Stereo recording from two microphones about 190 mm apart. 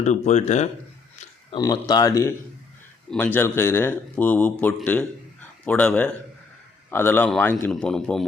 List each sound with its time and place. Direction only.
0.0 s speech: 40° left (ahead or behind)
1.5 s a man's voice: 20° left (ahead or behind); by 8.2 s 5° left (ahead or behind)